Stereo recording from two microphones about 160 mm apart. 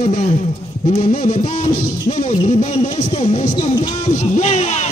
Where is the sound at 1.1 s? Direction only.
60° left (ahead or behind).